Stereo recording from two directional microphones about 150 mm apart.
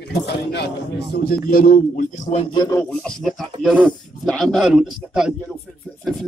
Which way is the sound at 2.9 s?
5° left (ahead or behind).